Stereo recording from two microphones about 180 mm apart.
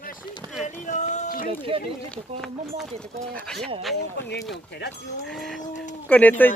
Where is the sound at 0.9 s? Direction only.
40° left (ahead or behind).